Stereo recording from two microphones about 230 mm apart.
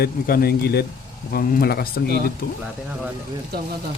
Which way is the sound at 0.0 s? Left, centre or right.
Left.